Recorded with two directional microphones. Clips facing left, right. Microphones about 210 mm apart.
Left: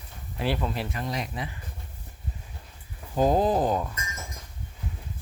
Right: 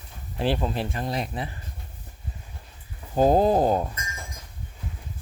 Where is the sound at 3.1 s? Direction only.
35° right (ahead or behind).